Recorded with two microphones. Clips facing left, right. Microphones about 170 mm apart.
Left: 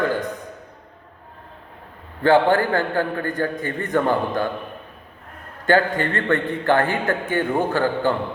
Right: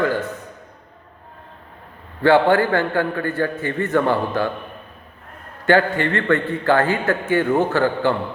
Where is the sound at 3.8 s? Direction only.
15° left (ahead or behind).